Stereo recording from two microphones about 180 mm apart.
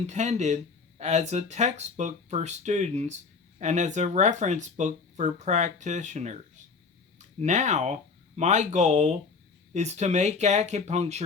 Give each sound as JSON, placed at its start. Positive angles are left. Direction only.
{"t": 0.1, "sound": "speech", "side_deg": -40}